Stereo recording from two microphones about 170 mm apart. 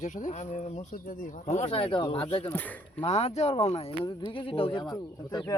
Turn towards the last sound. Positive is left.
turn(degrees=20)  # may be behind; listen again after turning